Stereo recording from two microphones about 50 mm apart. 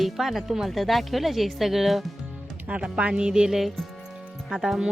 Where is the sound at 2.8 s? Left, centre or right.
Right; by 3.8 s centre.